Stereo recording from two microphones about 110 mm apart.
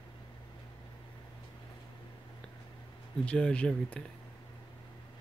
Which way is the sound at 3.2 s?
10° left (ahead or behind).